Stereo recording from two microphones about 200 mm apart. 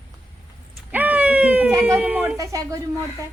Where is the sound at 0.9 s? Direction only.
10° right (ahead or behind).